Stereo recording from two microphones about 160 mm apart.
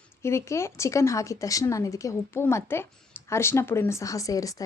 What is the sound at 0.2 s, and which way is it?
A woman's voice, 15° left (ahead or behind).